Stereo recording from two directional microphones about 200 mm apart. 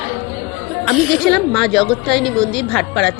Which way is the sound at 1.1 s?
5° left (ahead or behind).